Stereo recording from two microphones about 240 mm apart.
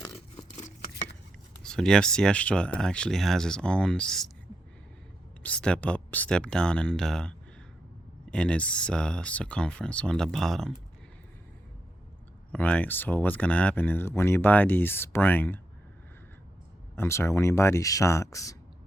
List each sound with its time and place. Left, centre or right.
0.5 s scissors: left
1.6 s speech: centre
5.4 s speech: centre
12.5 s speech: centre
16.9 s speech: centre